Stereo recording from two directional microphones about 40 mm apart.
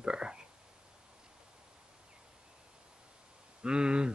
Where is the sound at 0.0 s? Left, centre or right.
Right.